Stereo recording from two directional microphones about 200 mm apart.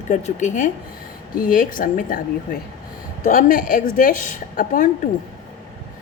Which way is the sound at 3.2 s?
45° left (ahead or behind).